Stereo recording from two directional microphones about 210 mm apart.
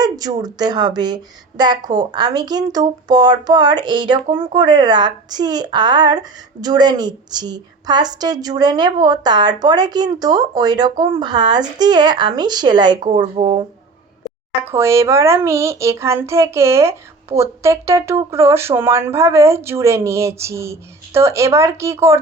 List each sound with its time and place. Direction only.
0.0 s speech: 20° right (ahead or behind)
14.6 s a child's voice: 10° right (ahead or behind)